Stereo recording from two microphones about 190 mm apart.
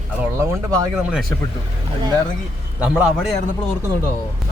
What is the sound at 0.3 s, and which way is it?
Speech, 20° right (ahead or behind).